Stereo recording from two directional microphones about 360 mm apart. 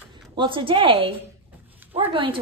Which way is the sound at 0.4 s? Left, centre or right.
Centre.